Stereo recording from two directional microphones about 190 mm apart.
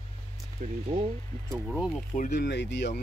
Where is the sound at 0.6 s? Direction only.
45° right (ahead or behind).